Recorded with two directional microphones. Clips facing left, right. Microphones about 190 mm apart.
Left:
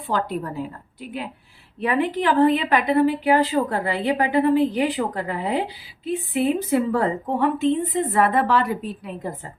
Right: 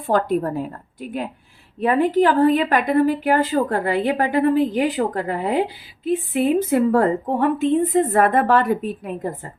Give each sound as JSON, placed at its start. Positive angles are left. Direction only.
{"t": 0.1, "sound": "a woman's voice", "side_deg": -50}